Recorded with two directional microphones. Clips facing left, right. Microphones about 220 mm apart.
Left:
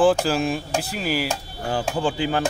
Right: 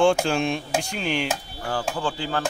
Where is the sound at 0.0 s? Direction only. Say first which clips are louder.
Left 1 dB; 5° left (ahead or behind).